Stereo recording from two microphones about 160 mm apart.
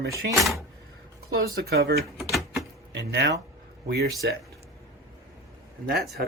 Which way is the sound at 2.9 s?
90° right.